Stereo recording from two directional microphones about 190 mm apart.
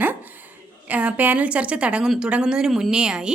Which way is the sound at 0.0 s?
10° right (ahead or behind).